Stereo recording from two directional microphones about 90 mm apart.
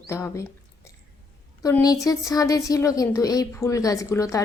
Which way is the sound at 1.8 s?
45° left (ahead or behind).